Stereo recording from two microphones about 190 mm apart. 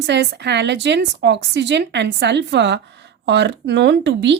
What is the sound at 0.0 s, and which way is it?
A woman's voice, 65° right (ahead or behind).